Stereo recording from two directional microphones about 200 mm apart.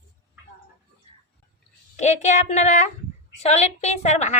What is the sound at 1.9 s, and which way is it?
A woman's voice, 35° left (ahead or behind).